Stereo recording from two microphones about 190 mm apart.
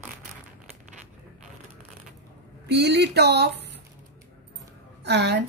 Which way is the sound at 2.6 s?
60° right (ahead or behind).